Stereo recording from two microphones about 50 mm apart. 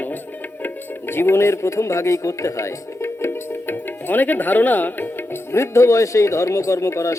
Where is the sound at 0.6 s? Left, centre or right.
Left.